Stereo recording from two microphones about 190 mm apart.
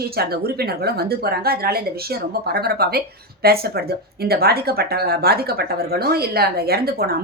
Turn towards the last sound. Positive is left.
turn(degrees=-55)  # may be behind; listen again after turning